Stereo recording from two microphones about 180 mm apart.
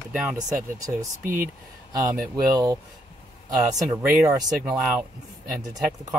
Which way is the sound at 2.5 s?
20° right (ahead or behind).